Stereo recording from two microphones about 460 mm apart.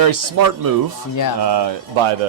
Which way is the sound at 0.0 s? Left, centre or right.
Right.